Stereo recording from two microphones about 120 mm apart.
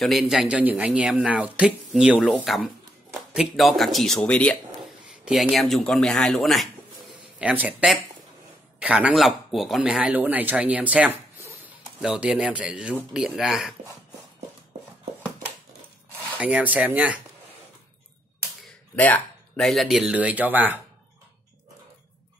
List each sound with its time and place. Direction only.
0.0 s speech: centre (ahead or behind)
5.2 s speech: centre (ahead or behind)
7.3 s speech: 10° right (ahead or behind)
16.3 s speech: 10° right (ahead or behind)
18.9 s a sound: 10° left (ahead or behind)
19.6 s speech: centre (ahead or behind); by 20.8 s 15° right (ahead or behind)